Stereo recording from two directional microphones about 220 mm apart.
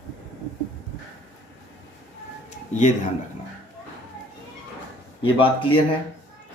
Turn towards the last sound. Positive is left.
turn(degrees=25)  # may be behind; listen again after turning